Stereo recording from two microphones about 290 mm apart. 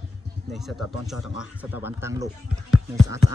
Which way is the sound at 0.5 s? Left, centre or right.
Centre.